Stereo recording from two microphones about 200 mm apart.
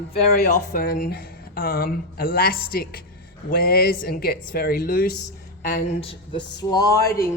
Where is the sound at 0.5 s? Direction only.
45° left (ahead or behind).